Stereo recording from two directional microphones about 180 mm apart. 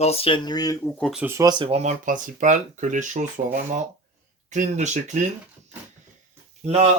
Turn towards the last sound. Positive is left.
turn(degrees=-35)  # may be behind; listen again after turning